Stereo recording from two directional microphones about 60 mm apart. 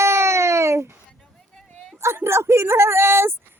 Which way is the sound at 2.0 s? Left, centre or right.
Right.